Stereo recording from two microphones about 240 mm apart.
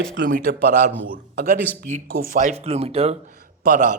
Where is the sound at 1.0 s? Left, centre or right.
Right.